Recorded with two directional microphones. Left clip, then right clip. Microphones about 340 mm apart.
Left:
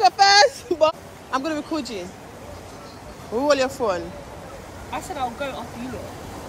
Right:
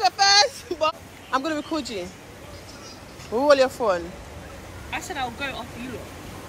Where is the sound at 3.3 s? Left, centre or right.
Centre.